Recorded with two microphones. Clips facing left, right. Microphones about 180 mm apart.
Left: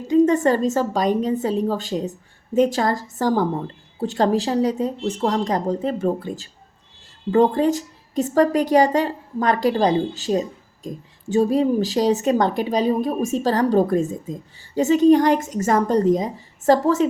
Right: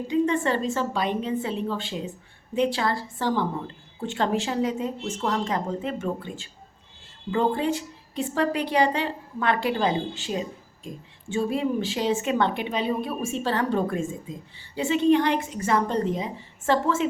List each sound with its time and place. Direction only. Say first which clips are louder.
0.1 s a woman's voice: left 8 dB; 40° left (ahead or behind)